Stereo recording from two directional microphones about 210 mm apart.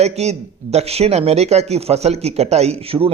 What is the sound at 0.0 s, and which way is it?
Speech, 30° right (ahead or behind).